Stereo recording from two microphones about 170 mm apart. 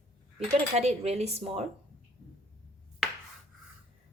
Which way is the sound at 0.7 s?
40° right (ahead or behind).